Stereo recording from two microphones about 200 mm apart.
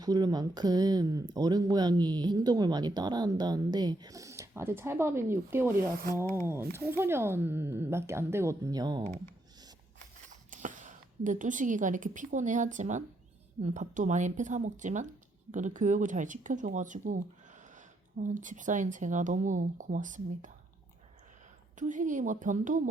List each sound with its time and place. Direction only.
0.0 s speech: 20° right (ahead or behind)
5.9 s rub: 45° right (ahead or behind)
6.2 s speech: 15° left (ahead or behind)
6.7 s speech: 10° right (ahead or behind)
10.5 s a woman's voice: 40° right (ahead or behind)
21.8 s speech: 40° right (ahead or behind)